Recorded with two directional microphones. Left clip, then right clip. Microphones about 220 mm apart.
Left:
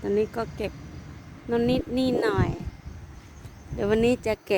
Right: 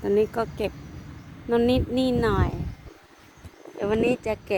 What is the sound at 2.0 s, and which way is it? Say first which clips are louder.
Speech: left 2 dB; 5° left (ahead or behind).